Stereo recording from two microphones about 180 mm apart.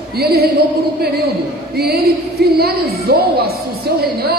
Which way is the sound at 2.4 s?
60° right (ahead or behind).